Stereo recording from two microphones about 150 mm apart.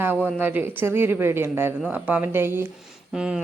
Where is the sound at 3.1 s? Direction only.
5° right (ahead or behind).